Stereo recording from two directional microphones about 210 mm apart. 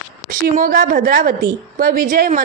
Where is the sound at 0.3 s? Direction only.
40° right (ahead or behind).